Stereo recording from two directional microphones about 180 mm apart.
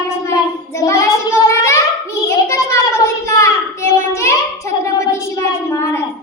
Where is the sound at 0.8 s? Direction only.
15° left (ahead or behind).